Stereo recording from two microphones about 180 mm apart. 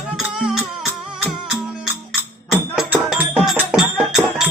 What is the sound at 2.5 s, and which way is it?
Music, centre (ahead or behind).